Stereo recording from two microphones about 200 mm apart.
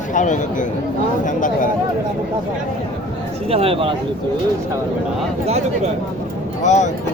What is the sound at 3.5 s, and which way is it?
Speech, 30° right (ahead or behind).